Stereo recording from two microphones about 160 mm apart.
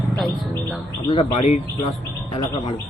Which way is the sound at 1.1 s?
35° left (ahead or behind).